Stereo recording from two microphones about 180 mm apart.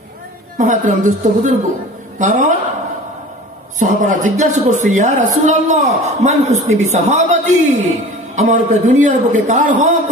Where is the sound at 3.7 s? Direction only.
45° right (ahead or behind).